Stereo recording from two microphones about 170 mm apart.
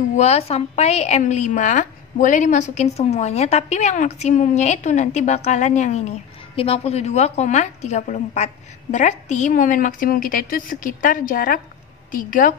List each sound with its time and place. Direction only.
0.1 s a woman's voice: 40° left (ahead or behind)